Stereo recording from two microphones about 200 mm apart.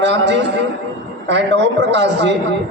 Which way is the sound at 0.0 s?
60° right (ahead or behind).